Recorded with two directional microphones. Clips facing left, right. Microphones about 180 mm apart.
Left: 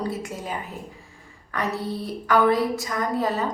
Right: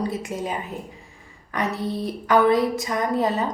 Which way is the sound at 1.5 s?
20° right (ahead or behind).